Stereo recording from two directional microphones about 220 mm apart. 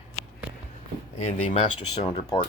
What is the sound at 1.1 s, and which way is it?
Speech, 25° left (ahead or behind).